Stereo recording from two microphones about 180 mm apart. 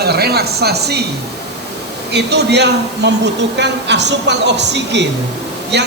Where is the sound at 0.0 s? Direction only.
60° right (ahead or behind).